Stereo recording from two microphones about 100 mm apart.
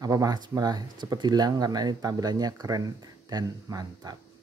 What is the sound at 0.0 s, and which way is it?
Speech, 35° right (ahead or behind).